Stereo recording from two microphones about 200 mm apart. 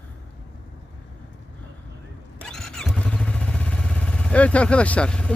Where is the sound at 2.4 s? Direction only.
5° left (ahead or behind).